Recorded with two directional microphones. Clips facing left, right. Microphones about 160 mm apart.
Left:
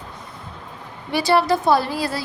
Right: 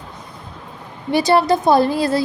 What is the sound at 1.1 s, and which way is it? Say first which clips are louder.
A woman's voice: right 3 dB; 20° right (ahead or behind).